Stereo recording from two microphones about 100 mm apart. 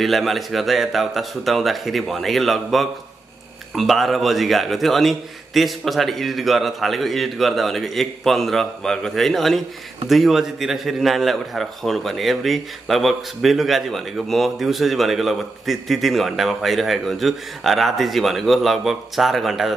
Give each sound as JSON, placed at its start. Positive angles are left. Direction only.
{"t": 0.0, "sound": "a man's voice", "side_deg": 0}